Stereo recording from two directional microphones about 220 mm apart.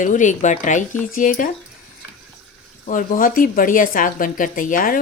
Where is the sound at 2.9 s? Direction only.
40° left (ahead or behind).